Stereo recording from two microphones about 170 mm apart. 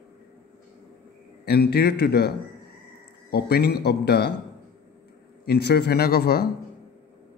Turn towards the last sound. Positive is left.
turn(degrees=65)  # may be behind; listen again after turning